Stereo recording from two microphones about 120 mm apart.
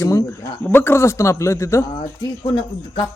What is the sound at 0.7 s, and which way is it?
A man's voice, 20° left (ahead or behind).